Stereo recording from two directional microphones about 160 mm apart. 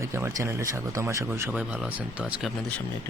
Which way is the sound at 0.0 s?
15° right (ahead or behind).